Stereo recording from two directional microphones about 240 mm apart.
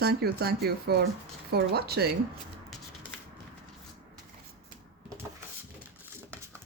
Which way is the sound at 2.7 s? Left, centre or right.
Centre.